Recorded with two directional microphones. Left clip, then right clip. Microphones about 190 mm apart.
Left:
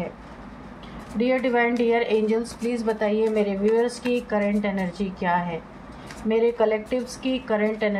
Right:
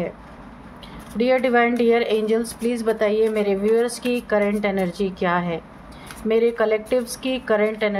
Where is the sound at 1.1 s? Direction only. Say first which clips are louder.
Right 4 dB; 50° right (ahead or behind).